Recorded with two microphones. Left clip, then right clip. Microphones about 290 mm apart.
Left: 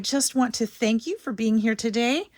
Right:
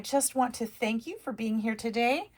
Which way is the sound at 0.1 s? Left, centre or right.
Left.